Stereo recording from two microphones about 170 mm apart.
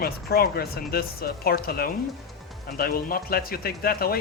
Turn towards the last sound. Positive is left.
turn(degrees=60)  # may be behind; listen again after turning